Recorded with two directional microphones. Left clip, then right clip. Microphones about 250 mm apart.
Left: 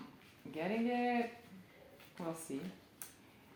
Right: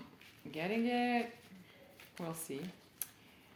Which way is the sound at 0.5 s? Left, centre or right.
Right.